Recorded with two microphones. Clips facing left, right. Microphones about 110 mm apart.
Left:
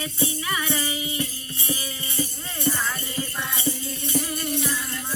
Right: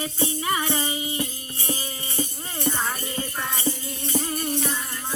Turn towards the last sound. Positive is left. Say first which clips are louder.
# right 1 dB
turn(degrees=-25)  # may be behind; listen again after turning